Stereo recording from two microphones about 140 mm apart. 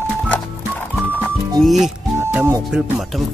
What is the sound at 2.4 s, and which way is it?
Speech, 20° right (ahead or behind).